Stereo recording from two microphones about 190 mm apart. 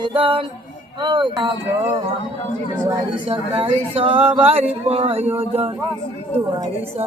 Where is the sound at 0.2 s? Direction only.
25° right (ahead or behind).